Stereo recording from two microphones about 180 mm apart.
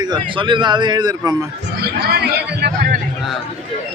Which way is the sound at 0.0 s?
25° right (ahead or behind).